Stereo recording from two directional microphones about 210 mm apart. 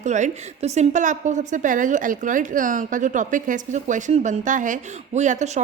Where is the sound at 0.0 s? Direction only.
35° right (ahead or behind).